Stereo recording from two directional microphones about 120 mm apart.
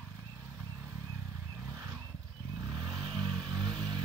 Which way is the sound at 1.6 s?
25° right (ahead or behind).